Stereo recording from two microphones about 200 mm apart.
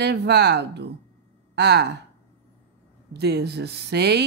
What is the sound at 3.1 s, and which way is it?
Speech, 55° right (ahead or behind).